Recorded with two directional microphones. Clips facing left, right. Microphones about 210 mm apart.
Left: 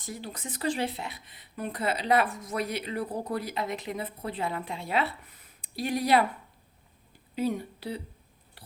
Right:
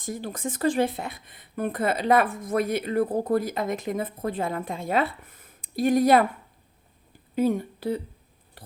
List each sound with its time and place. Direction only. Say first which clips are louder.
0.0 s speech: right 7 dB; 50° right (ahead or behind)
7.3 s speech: right 6 dB; 50° right (ahead or behind)
8.6 s a sound: right 6 dB; 50° right (ahead or behind)